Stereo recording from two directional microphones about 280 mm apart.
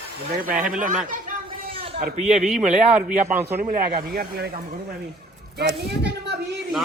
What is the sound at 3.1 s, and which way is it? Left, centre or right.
Speech, right.